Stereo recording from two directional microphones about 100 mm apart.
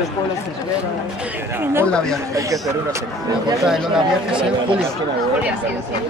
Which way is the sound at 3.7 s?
5° right (ahead or behind).